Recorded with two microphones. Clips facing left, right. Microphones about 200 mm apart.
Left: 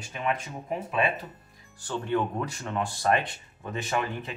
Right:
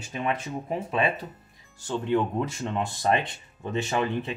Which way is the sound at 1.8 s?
25° right (ahead or behind).